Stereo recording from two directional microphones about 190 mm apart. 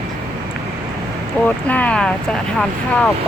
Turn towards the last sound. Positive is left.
turn(degrees=5)  # may be behind; listen again after turning